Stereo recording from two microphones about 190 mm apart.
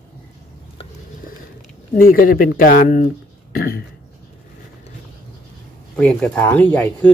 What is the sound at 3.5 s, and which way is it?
Throat clearing, 50° left (ahead or behind).